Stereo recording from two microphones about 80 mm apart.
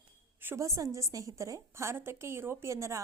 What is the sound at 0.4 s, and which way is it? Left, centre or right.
A woman's voice, right.